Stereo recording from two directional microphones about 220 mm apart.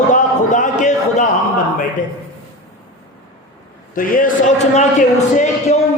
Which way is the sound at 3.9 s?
40° left (ahead or behind).